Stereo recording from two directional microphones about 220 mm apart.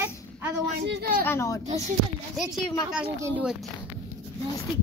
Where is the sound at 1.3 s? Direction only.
10° left (ahead or behind).